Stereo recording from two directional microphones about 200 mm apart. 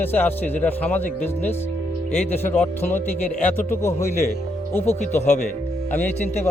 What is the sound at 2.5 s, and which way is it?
Speech, 10° left (ahead or behind).